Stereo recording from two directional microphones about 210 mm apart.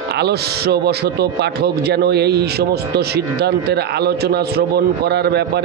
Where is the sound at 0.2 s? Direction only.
50° right (ahead or behind).